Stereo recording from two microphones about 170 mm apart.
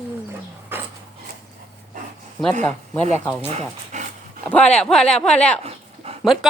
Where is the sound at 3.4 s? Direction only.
40° right (ahead or behind).